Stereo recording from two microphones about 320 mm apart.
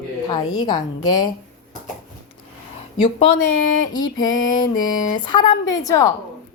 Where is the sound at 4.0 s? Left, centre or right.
Left.